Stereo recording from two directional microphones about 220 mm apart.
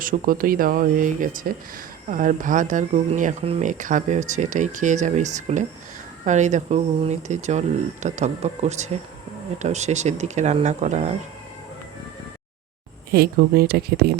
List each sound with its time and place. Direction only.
0.0 s speech: 40° right (ahead or behind)
13.1 s speech: 45° right (ahead or behind)